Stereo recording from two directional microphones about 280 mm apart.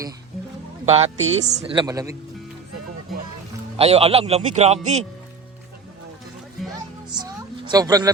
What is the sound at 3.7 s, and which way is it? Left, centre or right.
Speech, right.